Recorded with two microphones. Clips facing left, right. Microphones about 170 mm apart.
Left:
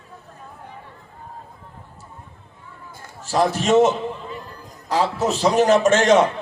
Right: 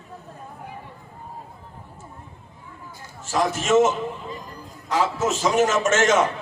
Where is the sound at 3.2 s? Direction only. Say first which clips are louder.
Left 3 dB; 35° left (ahead or behind).